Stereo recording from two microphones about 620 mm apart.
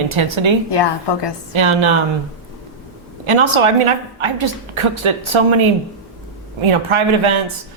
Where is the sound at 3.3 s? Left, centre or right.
Right.